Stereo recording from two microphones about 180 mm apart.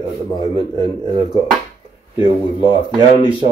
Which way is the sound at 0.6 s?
25° right (ahead or behind).